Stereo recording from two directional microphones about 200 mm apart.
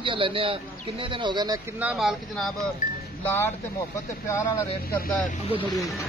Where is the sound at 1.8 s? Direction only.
5° right (ahead or behind).